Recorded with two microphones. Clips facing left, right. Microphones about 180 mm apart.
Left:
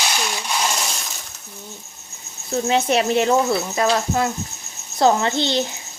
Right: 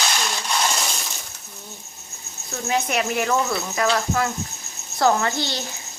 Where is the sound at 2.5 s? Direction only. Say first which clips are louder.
Left 5 dB; 30° left (ahead or behind).